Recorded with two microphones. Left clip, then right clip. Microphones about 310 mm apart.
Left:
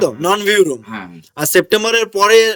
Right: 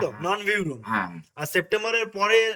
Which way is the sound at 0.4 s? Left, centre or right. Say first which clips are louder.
Left 12 dB; centre.